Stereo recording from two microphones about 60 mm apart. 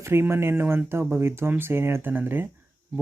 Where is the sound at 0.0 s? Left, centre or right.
Right.